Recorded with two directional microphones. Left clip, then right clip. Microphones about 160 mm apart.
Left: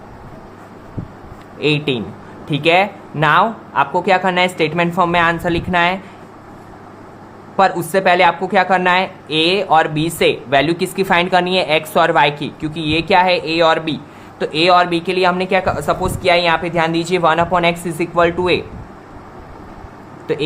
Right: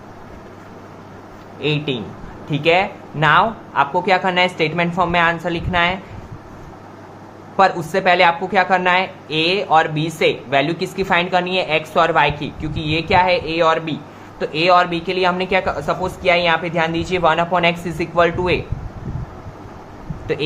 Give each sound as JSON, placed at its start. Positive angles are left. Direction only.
{"t": 1.5, "sound": "a woman's voice", "side_deg": 45}
{"t": 7.5, "sound": "a woman's voice", "side_deg": 25}
{"t": 20.3, "sound": "a woman's voice", "side_deg": 20}